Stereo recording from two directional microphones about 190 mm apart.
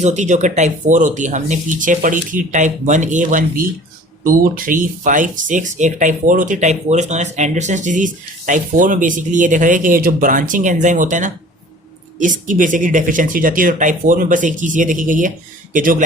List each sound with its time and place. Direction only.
0.0 s speech: 35° right (ahead or behind)